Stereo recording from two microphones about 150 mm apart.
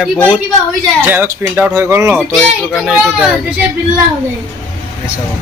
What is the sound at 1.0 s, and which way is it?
Speech, 15° right (ahead or behind).